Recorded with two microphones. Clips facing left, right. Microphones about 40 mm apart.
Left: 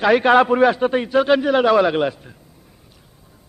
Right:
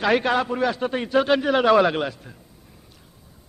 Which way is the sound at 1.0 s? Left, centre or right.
Centre.